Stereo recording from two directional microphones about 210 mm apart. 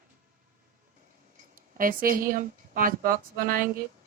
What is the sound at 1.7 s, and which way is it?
Speech, 40° right (ahead or behind).